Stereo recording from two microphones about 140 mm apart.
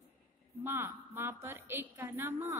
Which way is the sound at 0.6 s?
15° right (ahead or behind).